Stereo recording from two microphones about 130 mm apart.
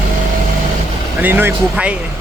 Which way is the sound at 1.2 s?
15° right (ahead or behind).